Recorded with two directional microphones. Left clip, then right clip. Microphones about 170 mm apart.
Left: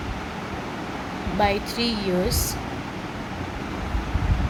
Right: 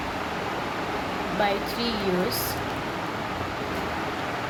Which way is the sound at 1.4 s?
50° left (ahead or behind).